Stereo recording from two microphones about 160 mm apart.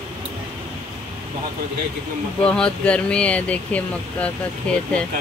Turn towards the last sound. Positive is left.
turn(degrees=5)  # may be behind; listen again after turning